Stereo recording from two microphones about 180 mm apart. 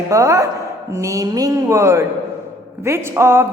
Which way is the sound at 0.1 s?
15° right (ahead or behind).